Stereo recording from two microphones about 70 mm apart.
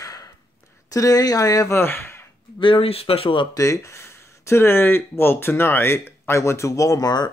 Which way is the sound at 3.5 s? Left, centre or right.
Left.